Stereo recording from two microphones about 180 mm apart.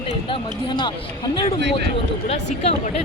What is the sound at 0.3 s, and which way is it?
Speech, 25° left (ahead or behind).